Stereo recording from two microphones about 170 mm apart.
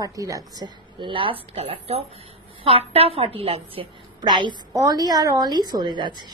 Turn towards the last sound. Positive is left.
turn(degrees=-25)  # may be behind; listen again after turning